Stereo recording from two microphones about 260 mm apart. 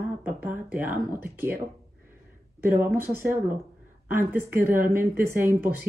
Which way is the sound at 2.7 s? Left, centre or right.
Centre.